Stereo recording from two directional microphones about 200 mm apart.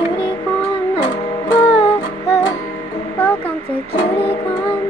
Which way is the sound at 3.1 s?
10° left (ahead or behind).